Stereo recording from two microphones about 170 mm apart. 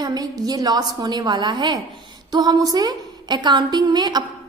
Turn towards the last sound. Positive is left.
turn(degrees=-25)  # may be behind; listen again after turning